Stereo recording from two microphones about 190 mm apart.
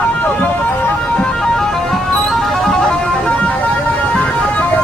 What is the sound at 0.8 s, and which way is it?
Music, 5° left (ahead or behind).